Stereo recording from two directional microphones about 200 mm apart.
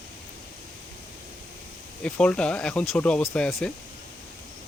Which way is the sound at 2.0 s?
5° left (ahead or behind).